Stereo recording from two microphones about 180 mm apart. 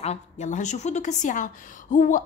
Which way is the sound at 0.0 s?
40° left (ahead or behind).